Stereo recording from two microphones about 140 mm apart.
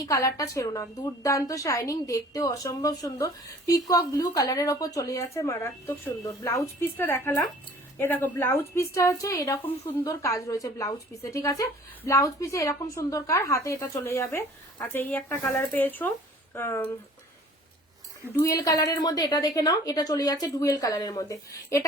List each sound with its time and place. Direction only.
0.0 s a woman's voice: 25° left (ahead or behind)
18.3 s a woman's voice: 25° left (ahead or behind)